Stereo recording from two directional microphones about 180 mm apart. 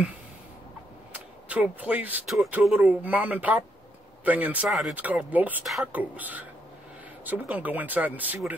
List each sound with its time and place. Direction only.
1.1 s speech: 10° right (ahead or behind)